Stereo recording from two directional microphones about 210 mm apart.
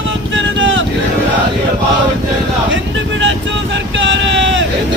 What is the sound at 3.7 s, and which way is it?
Vehicle, 60° right (ahead or behind).